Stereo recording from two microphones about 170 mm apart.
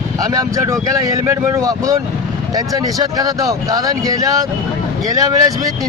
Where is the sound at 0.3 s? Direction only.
20° right (ahead or behind).